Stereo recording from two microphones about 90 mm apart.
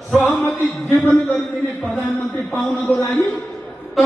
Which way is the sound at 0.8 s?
Centre (ahead or behind).